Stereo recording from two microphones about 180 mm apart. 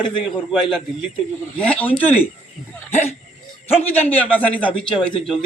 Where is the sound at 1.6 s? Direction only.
10° left (ahead or behind).